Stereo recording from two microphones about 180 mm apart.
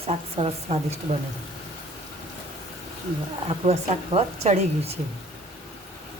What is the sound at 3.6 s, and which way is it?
Speech, 35° right (ahead or behind).